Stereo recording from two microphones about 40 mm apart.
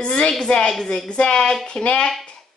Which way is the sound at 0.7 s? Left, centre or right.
Centre.